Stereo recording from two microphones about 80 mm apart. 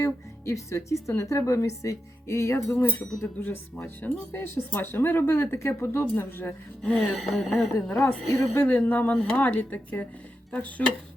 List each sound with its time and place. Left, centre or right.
0.0 s speech: left
6.8 s gasp: centre
8.0 s speech: left